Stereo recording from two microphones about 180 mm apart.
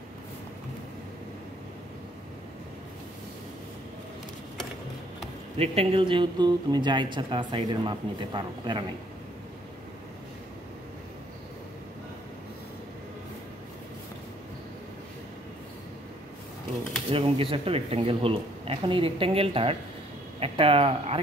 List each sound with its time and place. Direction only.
5.6 s speech: 35° right (ahead or behind)
17.1 s speech: 30° right (ahead or behind)